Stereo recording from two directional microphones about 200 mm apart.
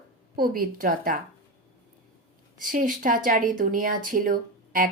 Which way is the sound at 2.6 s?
40° right (ahead or behind).